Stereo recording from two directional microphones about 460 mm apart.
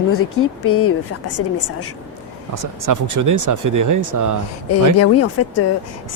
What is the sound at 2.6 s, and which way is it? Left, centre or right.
Speech, right.